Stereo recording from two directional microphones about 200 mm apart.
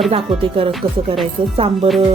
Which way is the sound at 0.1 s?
25° right (ahead or behind).